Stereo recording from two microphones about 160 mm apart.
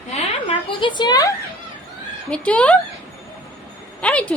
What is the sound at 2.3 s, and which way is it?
Speech, 5° left (ahead or behind).